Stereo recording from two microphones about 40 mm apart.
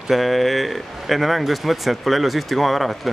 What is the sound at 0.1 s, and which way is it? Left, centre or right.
Speech, centre.